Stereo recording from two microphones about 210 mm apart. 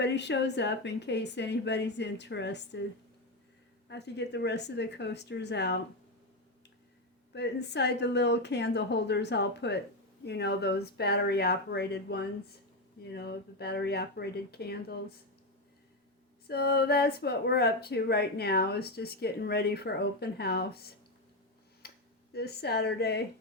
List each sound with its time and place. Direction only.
0.0 s speech: 55° left (ahead or behind)
3.8 s speech: 55° left (ahead or behind)
7.3 s speech: 55° left (ahead or behind)
16.5 s speech: 50° left (ahead or behind)
21.8 s a sound: 50° left (ahead or behind)